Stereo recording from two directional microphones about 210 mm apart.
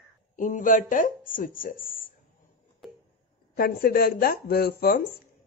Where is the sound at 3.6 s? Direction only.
45° left (ahead or behind).